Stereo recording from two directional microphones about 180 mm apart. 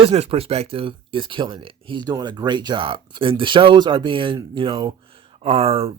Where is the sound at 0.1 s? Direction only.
35° right (ahead or behind).